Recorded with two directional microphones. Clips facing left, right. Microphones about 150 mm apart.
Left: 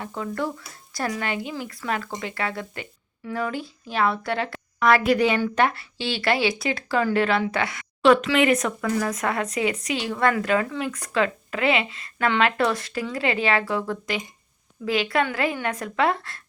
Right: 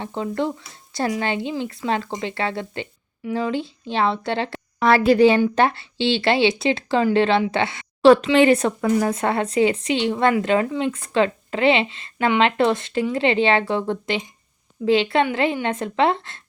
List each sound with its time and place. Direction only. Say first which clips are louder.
0.0 s speech: right 4 dB; 25° right (ahead or behind)